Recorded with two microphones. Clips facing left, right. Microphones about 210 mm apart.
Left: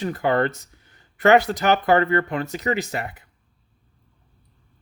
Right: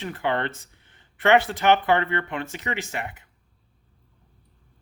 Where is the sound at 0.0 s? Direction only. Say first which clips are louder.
Left 5 dB; 40° left (ahead or behind).